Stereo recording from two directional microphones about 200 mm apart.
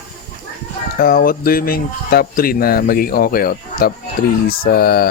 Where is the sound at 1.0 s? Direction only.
45° left (ahead or behind).